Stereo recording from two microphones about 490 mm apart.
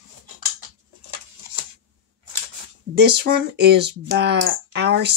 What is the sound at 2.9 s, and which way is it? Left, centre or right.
Speech, centre.